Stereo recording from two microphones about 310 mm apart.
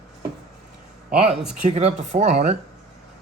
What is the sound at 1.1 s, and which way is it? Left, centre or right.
Speech, centre.